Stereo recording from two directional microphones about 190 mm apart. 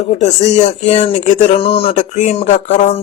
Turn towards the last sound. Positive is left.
turn(degrees=40)  # may be behind; listen again after turning